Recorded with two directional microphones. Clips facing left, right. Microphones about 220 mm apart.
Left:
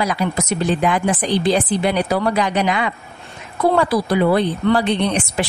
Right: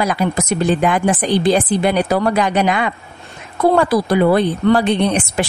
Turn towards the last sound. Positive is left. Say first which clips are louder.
# right 3 dB
turn(degrees=-50)  # may be behind; listen again after turning